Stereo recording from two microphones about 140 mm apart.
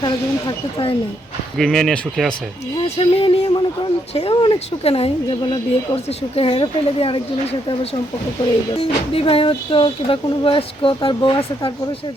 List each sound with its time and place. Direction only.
0.0 s speech: 35° left (ahead or behind)
1.5 s speech: centre (ahead or behind)
3.0 s speech: 45° left (ahead or behind)